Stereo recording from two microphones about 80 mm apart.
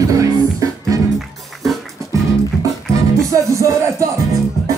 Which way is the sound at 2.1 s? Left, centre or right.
Right.